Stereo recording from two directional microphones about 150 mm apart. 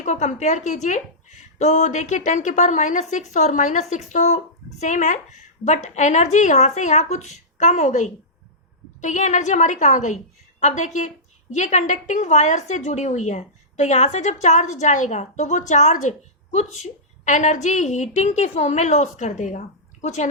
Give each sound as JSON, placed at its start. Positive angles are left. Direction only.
{"t": 0.0, "sound": "a woman's voice", "side_deg": 50}